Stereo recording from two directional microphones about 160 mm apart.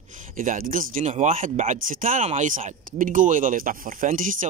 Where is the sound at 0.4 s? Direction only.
60° right (ahead or behind).